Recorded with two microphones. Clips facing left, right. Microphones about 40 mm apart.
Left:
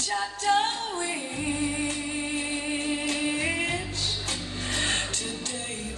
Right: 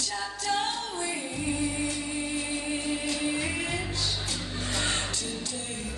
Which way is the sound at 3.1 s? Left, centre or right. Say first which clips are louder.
Left 3 dB; left.